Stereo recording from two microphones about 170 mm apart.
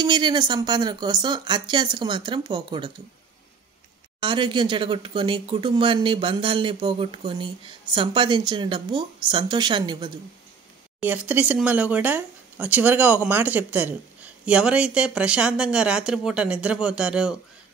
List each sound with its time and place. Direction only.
0.0 s speech: 25° right (ahead or behind)
4.2 s speech: 30° right (ahead or behind)
11.0 s speech: 10° right (ahead or behind)